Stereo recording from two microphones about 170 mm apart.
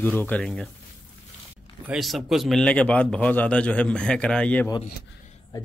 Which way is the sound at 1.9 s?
Centre (ahead or behind).